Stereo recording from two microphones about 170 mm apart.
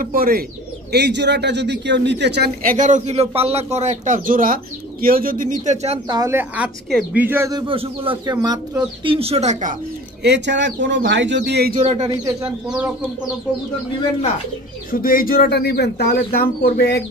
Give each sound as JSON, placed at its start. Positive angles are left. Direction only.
{"t": 0.0, "sound": "a man's voice", "side_deg": -60}
{"t": 0.9, "sound": "a man's voice", "side_deg": -85}
{"t": 6.0, "sound": "speech", "side_deg": -20}
{"t": 7.6, "sound": "speech", "side_deg": -35}
{"t": 10.2, "sound": "speech", "side_deg": -90}
{"t": 11.7, "sound": "speech", "side_deg": -40}
{"t": 12.6, "sound": "speech", "side_deg": -5}
{"t": 14.9, "sound": "speech", "side_deg": 55}